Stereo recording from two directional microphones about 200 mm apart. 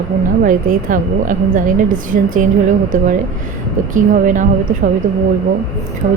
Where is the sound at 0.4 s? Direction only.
40° right (ahead or behind).